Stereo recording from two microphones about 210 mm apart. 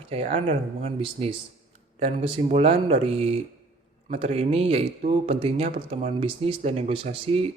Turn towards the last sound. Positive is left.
turn(degrees=-25)  # may be behind; listen again after turning